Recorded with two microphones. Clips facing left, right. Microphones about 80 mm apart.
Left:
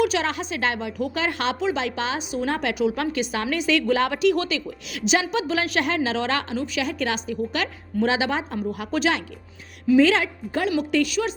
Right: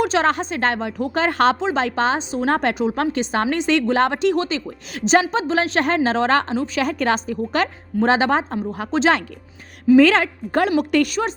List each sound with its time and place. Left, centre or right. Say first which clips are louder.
0.0 s a woman's voice: right 4 dB; right
8.5 s speech: right 3 dB; right
9.9 s a woman's voice: right 4 dB; right